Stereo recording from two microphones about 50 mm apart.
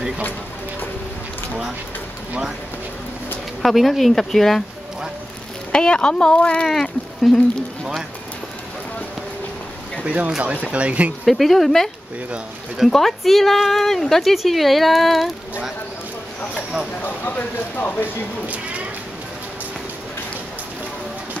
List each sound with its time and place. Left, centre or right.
3.6 s speech: centre
5.7 s speech: centre
7.3 s speech: centre
10.0 s speech: right
11.2 s speech: centre
12.9 s speech: centre
17.0 s speech: left